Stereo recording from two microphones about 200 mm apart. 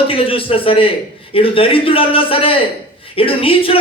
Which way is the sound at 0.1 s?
25° left (ahead or behind).